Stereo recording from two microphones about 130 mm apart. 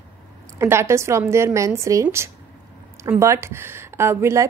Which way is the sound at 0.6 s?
20° right (ahead or behind).